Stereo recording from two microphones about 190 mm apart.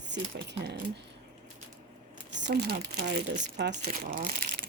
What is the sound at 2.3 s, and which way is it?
Speech, 60° right (ahead or behind).